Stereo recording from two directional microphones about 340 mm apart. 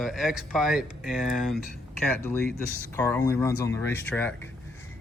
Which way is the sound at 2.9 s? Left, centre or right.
Centre.